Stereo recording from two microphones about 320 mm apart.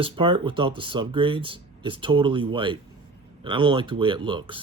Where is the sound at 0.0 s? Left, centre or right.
Centre.